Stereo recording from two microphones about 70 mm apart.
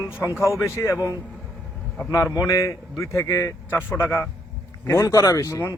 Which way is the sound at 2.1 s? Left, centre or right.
Left.